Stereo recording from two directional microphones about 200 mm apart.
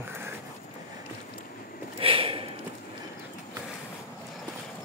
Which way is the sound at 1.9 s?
25° right (ahead or behind).